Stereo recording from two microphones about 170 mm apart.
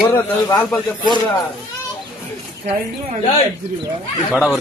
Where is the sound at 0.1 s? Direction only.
20° left (ahead or behind).